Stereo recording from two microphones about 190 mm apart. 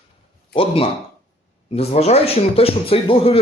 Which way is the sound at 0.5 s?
30° left (ahead or behind).